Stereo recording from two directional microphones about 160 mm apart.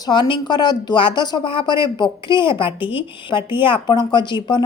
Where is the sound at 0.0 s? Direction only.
30° left (ahead or behind).